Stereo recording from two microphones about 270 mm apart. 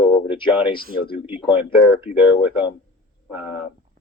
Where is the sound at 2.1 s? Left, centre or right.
Centre.